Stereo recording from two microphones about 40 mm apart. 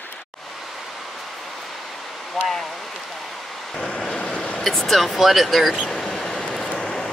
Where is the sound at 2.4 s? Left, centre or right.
Centre.